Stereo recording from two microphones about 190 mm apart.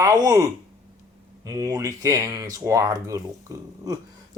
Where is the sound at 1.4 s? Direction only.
20° right (ahead or behind).